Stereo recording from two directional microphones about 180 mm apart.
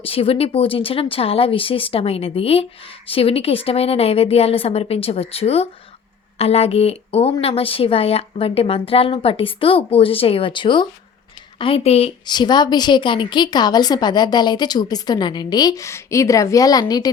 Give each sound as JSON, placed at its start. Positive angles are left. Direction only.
{"t": 0.0, "sound": "a woman's voice", "side_deg": 30}